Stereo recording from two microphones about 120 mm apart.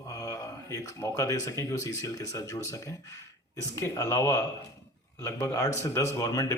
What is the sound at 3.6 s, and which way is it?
Speech, 25° left (ahead or behind).